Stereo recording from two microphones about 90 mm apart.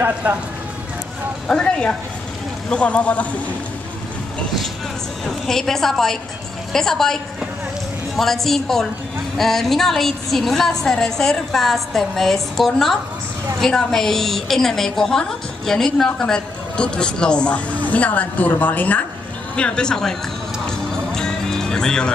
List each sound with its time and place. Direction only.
0.0 s speech: 20° right (ahead or behind)
1.5 s a woman's voice: 10° left (ahead or behind)
5.2 s a woman's voice: 5° left (ahead or behind)
8.2 s a woman's voice: 5° left (ahead or behind)
20.6 s music: 5° left (ahead or behind)